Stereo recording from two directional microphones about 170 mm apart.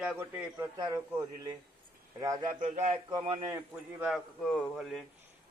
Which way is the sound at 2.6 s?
40° right (ahead or behind).